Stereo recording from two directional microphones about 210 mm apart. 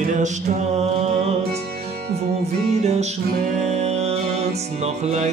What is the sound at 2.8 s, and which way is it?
Music, 30° right (ahead or behind).